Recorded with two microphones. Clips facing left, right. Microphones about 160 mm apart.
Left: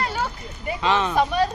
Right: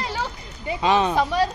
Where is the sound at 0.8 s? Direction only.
15° right (ahead or behind).